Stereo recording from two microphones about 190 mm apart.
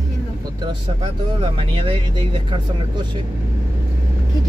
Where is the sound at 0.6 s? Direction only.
25° right (ahead or behind).